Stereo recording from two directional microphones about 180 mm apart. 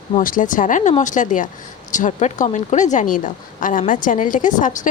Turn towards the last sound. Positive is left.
turn(degrees=45)  # may be behind; listen again after turning